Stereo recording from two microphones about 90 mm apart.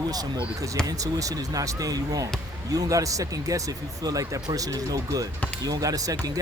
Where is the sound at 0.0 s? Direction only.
45° right (ahead or behind).